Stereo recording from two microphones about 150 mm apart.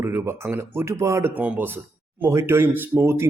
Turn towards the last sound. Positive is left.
turn(degrees=-20)  # may be behind; listen again after turning